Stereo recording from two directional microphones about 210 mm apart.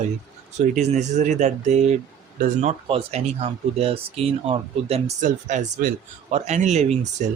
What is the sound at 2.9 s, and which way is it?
Speech, 30° right (ahead or behind).